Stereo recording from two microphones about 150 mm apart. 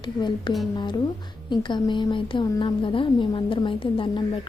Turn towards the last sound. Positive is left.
turn(degrees=35)  # may be behind; listen again after turning